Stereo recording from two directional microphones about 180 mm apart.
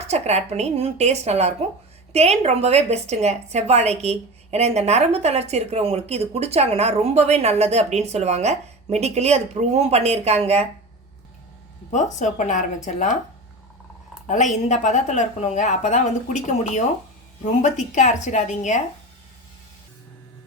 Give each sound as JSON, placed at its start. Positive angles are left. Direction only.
{"t": 0.1, "sound": "a woman's voice", "side_deg": -40}
{"t": 11.9, "sound": "speech", "side_deg": 40}
{"t": 14.3, "sound": "a woman's voice", "side_deg": 40}